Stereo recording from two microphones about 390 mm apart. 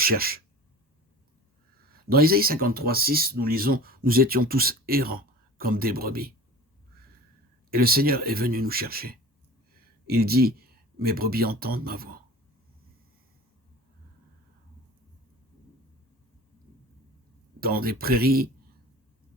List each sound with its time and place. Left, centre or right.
0.0 s speech: right
1.9 s speech: right
7.7 s speech: right
17.6 s speech: right